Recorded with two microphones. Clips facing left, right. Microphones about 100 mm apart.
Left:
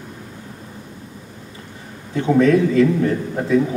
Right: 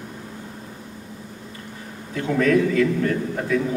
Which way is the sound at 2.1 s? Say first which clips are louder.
Left 4 dB; 25° left (ahead or behind).